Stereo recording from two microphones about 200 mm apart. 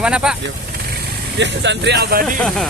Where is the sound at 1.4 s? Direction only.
60° right (ahead or behind).